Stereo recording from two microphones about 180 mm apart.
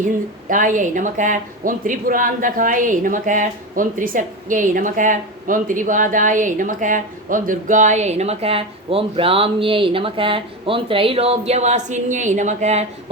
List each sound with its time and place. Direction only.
0.0 s speech: 50° right (ahead or behind)